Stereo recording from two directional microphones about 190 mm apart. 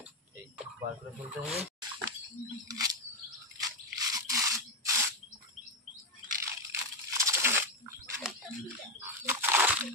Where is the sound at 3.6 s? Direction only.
20° right (ahead or behind).